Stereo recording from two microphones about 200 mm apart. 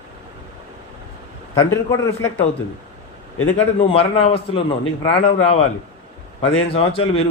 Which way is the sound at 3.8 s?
30° left (ahead or behind).